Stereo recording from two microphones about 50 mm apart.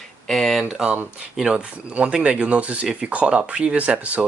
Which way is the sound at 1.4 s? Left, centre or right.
Centre.